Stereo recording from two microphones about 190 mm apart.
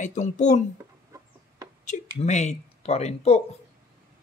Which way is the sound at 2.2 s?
35° left (ahead or behind).